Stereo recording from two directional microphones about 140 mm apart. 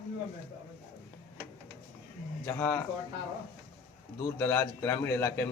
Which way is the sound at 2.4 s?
15° left (ahead or behind).